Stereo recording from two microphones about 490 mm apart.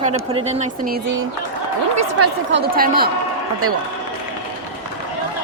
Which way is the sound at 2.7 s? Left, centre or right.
Centre.